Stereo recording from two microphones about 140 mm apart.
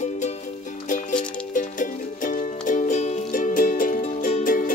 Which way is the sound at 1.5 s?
70° left (ahead or behind).